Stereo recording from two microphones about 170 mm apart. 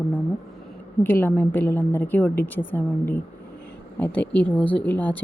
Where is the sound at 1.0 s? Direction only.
10° left (ahead or behind).